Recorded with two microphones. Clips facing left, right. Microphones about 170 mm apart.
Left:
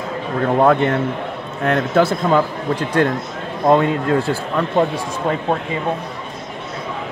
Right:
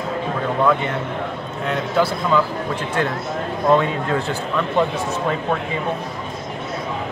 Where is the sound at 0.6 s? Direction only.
50° left (ahead or behind).